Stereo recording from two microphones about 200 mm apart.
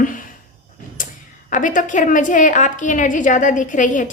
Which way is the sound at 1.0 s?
40° left (ahead or behind).